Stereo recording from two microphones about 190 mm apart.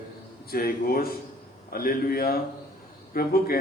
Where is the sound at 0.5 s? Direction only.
50° left (ahead or behind).